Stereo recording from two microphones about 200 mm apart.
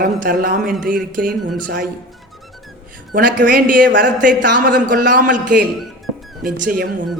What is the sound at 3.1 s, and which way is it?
A man's voice, 45° right (ahead or behind).